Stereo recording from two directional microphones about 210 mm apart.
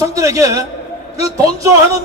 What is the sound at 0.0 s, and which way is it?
A man's voice, 15° right (ahead or behind).